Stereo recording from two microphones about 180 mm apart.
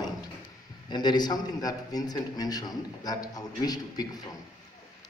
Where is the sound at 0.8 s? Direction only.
25° left (ahead or behind).